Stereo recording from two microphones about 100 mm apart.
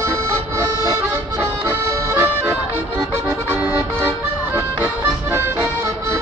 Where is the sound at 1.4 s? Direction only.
30° right (ahead or behind).